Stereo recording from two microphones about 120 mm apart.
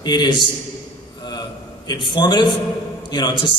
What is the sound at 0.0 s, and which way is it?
Speech, 35° left (ahead or behind).